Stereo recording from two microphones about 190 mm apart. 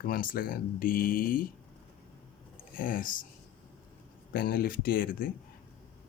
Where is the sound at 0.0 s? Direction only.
50° left (ahead or behind).